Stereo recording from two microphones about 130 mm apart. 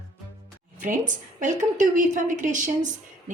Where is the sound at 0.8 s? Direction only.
85° right.